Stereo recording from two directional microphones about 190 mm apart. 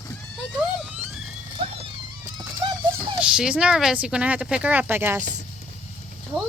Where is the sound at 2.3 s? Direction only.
25° right (ahead or behind).